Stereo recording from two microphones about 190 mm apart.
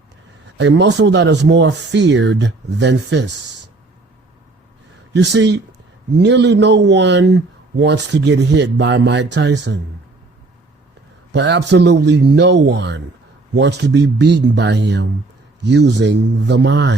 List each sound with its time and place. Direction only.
0.5 s speech: 65° right (ahead or behind)
5.1 s a man's voice: 65° right (ahead or behind)
11.3 s a man's voice: 65° right (ahead or behind)